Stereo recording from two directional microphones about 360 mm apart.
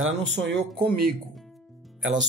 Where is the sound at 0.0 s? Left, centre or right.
Right.